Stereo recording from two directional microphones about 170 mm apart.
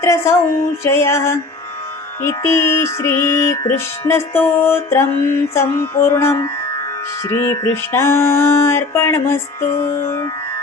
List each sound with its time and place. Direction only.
0.0 s music: 15° left (ahead or behind)